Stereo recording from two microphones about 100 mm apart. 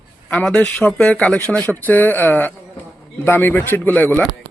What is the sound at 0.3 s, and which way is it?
A man's voice, 10° left (ahead or behind).